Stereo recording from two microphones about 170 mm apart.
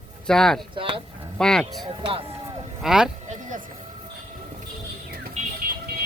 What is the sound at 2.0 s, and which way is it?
Speech, 35° right (ahead or behind).